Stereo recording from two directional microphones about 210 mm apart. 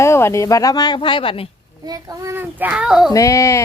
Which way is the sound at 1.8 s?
15° right (ahead or behind).